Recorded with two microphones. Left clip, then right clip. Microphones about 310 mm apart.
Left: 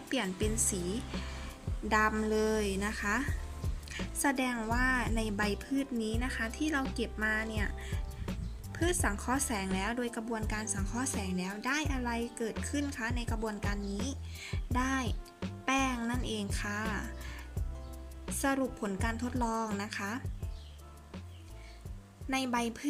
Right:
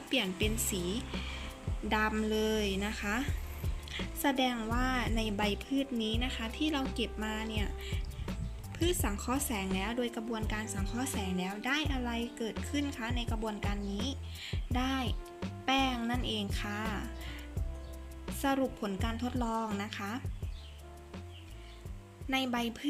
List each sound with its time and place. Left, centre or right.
0.1 s a woman's voice: centre
0.4 s speech: left
1.9 s a woman's voice: centre
16.4 s music: centre
18.3 s a woman's voice: centre
22.3 s a woman's voice: centre